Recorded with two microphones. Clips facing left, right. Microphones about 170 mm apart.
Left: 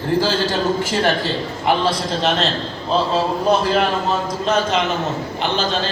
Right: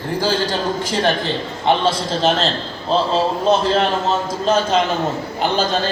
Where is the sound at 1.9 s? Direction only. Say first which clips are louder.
Right 2 dB; 30° right (ahead or behind).